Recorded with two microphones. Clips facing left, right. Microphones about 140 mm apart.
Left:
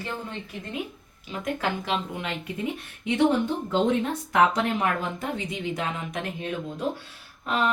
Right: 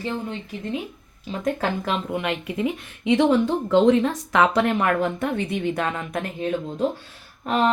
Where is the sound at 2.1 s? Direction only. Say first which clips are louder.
Right 6 dB; 70° right (ahead or behind); by 6.2 s 50° right (ahead or behind).